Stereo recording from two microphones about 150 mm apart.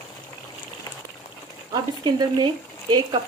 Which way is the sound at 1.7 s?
30° right (ahead or behind).